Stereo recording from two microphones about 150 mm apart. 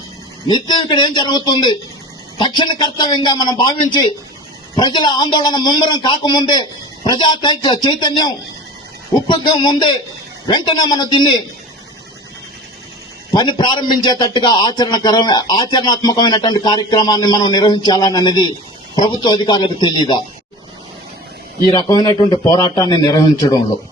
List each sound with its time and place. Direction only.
0.5 s a man's voice: 30° left (ahead or behind)
13.3 s a man's voice: 30° left (ahead or behind)
21.7 s a man's voice: 25° left (ahead or behind)